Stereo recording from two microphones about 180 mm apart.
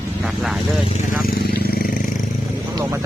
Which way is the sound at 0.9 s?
50° left (ahead or behind).